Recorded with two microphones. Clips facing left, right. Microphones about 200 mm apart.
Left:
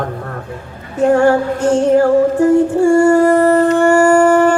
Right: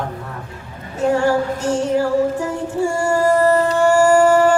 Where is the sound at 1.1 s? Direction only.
55° left (ahead or behind).